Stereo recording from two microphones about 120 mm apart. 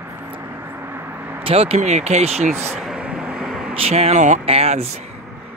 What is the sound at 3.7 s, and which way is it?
Speech, 55° right (ahead or behind).